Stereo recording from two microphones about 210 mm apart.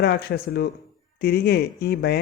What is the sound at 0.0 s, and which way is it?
Speech, 50° left (ahead or behind).